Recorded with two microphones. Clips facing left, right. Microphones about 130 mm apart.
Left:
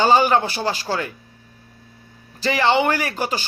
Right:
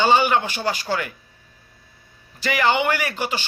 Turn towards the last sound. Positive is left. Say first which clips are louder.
# left 2 dB
turn(degrees=40)  # may be behind; listen again after turning